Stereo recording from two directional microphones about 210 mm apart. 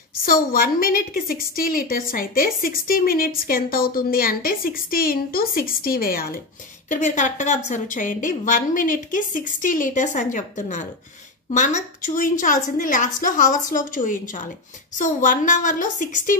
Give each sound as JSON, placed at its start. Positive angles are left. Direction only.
{"t": 0.2, "sound": "a woman's voice", "side_deg": 45}